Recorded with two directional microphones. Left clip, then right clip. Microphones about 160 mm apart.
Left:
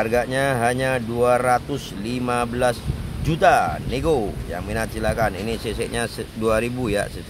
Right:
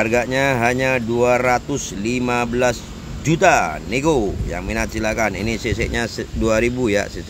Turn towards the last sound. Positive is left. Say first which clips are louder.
# right 4 dB
turn(degrees=-10)  # may be behind; listen again after turning